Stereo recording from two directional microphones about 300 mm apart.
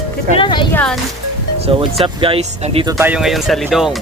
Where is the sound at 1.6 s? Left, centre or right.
Centre.